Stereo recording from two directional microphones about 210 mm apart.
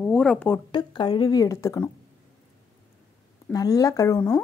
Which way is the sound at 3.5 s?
15° left (ahead or behind).